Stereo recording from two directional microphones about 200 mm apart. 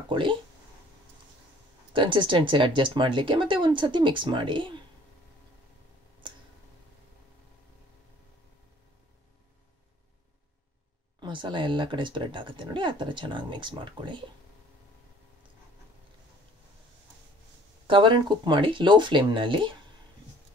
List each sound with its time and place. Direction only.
0.1 s speech: 25° right (ahead or behind)
2.0 s speech: 25° right (ahead or behind)
11.1 s speech: 25° right (ahead or behind)
17.8 s speech: 25° right (ahead or behind)